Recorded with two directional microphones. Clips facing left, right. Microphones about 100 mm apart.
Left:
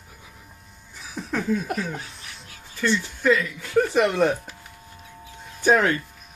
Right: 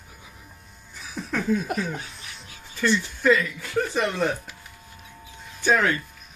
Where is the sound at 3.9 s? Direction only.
60° left (ahead or behind).